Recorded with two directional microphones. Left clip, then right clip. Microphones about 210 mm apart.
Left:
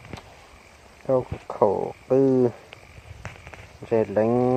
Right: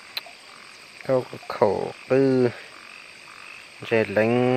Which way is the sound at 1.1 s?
20° right (ahead or behind).